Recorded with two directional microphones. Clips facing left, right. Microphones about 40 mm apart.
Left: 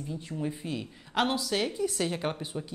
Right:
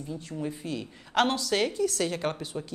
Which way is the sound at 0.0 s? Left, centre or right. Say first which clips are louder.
Even; centre.